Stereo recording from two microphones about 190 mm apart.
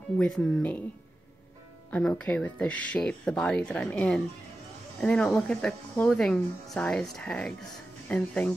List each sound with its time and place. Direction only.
0.2 s speech: 5° left (ahead or behind)
1.9 s speech: 5° left (ahead or behind)